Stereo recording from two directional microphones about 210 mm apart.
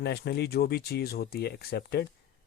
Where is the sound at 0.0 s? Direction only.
50° left (ahead or behind).